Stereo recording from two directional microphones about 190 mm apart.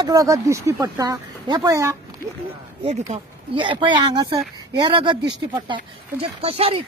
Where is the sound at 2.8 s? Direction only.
30° right (ahead or behind).